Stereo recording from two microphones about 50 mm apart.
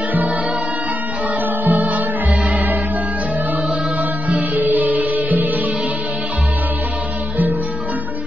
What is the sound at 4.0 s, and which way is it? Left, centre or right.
Music, right.